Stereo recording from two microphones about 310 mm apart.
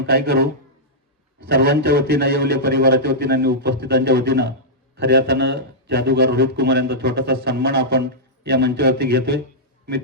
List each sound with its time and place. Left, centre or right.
0.0 s a man's voice: right
1.5 s a man's voice: right